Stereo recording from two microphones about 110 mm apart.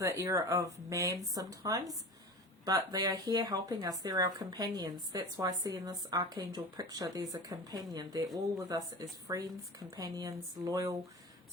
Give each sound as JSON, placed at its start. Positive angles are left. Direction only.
{"t": 0.0, "sound": "speech", "side_deg": -30}